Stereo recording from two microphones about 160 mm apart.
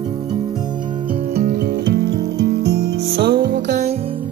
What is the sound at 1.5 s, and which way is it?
Music, 90° right.